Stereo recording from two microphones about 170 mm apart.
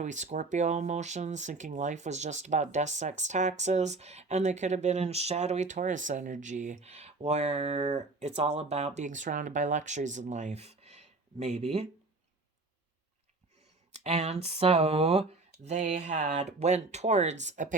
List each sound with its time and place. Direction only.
0.0 s speech: 45° right (ahead or behind)
14.0 s speech: 40° right (ahead or behind)